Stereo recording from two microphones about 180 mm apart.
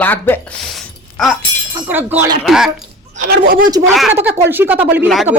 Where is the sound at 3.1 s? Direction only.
55° right (ahead or behind).